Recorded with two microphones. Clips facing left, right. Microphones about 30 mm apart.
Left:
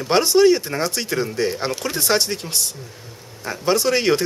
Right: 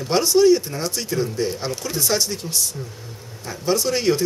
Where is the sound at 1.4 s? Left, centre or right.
Left.